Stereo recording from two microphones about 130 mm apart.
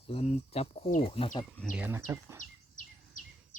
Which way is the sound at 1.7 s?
15° right (ahead or behind).